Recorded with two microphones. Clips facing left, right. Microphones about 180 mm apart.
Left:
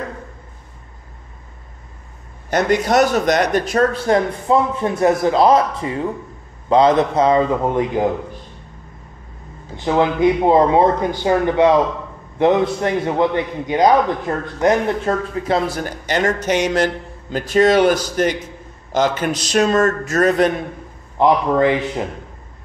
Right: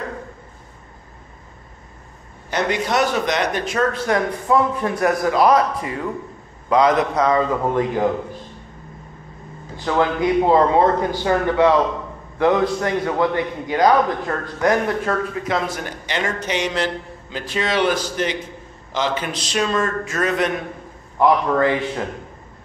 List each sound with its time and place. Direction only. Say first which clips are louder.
2.5 s speech: left 5 dB; 45° left (ahead or behind); by 8.1 s 20° left (ahead or behind)
9.8 s a man's voice: left 3 dB; 20° left (ahead or behind); by 20.5 s 35° left (ahead or behind)
21.2 s speech: left 2 dB; 20° left (ahead or behind)